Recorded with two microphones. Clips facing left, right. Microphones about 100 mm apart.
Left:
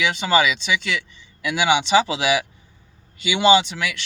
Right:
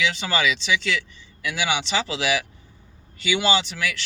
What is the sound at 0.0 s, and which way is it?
Speech, 15° left (ahead or behind).